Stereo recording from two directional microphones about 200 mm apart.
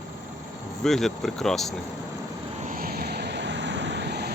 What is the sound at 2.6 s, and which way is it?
Vehicle, 45° right (ahead or behind).